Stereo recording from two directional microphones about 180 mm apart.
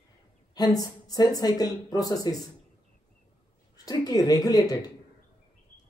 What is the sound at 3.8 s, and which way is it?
Speech, 20° left (ahead or behind).